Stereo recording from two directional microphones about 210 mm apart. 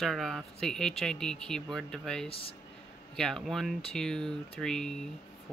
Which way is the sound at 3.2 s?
5° left (ahead or behind).